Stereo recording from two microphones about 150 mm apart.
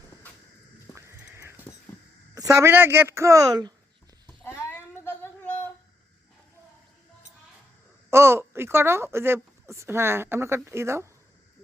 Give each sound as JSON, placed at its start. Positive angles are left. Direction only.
{"t": 0.9, "sound": "a sound", "side_deg": 20}
{"t": 1.2, "sound": "dog", "side_deg": -15}
{"t": 2.3, "sound": "speech", "side_deg": -20}
{"t": 4.4, "sound": "child singing", "side_deg": 15}
{"t": 8.1, "sound": "speech", "side_deg": -15}